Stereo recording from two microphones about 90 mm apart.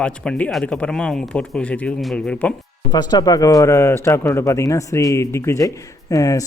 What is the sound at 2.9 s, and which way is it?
Speech, 50° left (ahead or behind).